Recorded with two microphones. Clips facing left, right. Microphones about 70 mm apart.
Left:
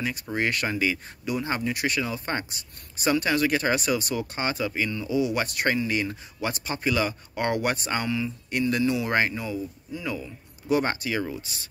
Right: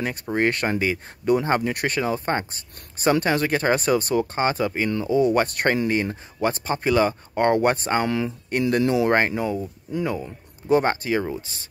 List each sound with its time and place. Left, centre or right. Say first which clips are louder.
0.0 s speech: right 5 dB; right
8.5 s speech: right 3 dB; right